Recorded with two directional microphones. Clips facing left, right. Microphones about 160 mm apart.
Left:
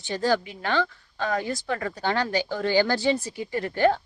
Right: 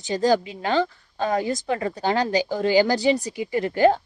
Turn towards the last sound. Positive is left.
turn(degrees=-20)  # may be behind; listen again after turning